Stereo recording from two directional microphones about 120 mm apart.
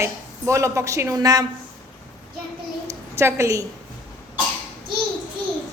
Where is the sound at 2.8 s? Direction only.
25° right (ahead or behind).